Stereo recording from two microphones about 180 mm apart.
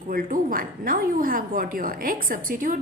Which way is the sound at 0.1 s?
50° right (ahead or behind).